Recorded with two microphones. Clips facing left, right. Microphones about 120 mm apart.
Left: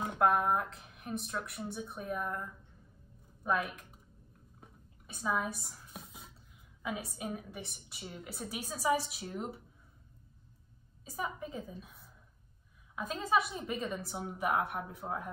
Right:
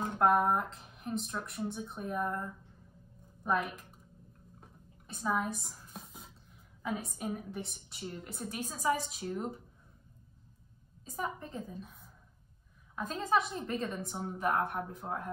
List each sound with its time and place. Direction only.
0.2 s speech: centre (ahead or behind)
4.6 s a sound: centre (ahead or behind)
6.8 s speech: 5° left (ahead or behind)
11.1 s speech: 5° left (ahead or behind)
12.9 s a woman's voice: 5° left (ahead or behind)